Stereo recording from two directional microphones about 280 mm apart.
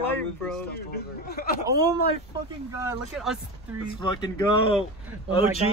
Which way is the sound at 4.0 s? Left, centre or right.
Centre.